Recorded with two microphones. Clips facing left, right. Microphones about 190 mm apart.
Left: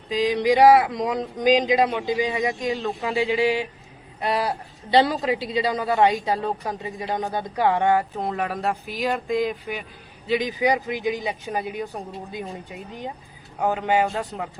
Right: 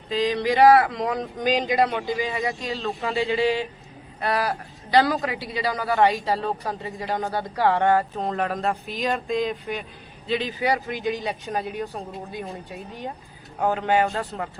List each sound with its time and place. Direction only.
0.1 s a man's voice: 15° left (ahead or behind)